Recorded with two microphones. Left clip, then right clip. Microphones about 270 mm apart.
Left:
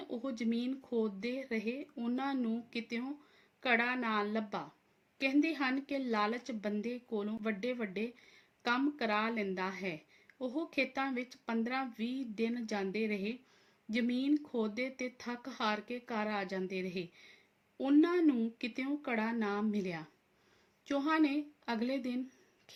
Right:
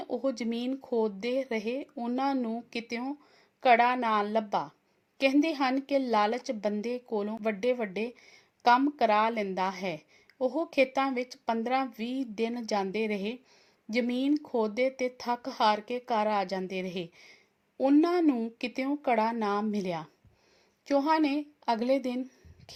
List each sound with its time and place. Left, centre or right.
0.0 s a woman's voice: right